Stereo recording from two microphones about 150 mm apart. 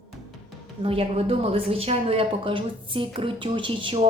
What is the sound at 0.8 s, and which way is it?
A woman's voice, 40° right (ahead or behind).